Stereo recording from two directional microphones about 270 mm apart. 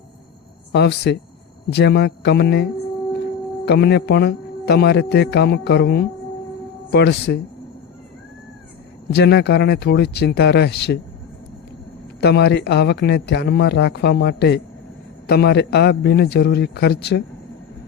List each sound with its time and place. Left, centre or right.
0.7 s speech: left
3.7 s speech: left
9.1 s speech: left
12.2 s speech: left